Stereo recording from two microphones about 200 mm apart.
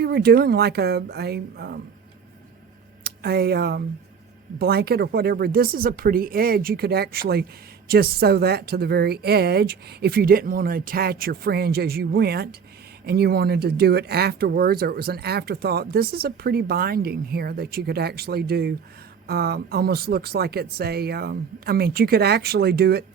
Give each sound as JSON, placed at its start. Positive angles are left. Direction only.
{"t": 0.0, "sound": "speech", "side_deg": -50}
{"t": 3.0, "sound": "speech", "side_deg": -50}